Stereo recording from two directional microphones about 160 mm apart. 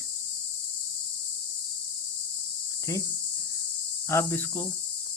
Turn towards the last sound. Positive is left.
turn(degrees=15)  # may be behind; listen again after turning